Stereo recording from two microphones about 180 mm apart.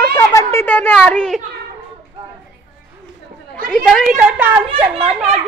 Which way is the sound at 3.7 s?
Centre (ahead or behind).